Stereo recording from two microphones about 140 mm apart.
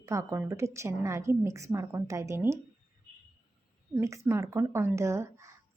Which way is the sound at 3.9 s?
20° right (ahead or behind).